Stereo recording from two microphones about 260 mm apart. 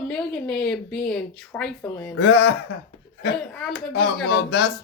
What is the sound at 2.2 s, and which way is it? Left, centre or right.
Speech, left.